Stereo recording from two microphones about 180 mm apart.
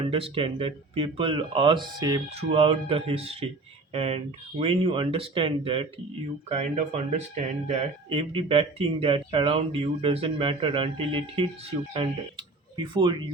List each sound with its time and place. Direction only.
0.0 s speech: 30° right (ahead or behind)